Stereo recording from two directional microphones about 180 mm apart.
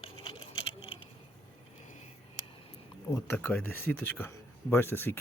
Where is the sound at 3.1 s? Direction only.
10° left (ahead or behind).